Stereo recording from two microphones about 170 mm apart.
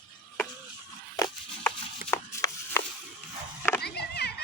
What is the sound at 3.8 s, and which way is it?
Children playing, 70° left (ahead or behind).